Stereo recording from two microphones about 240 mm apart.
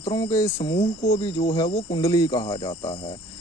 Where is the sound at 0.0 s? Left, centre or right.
Centre.